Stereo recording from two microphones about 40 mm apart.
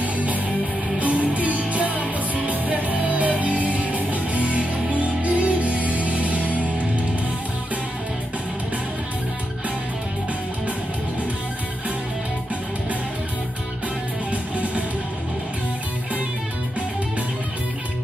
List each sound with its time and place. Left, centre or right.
0.0 s music: right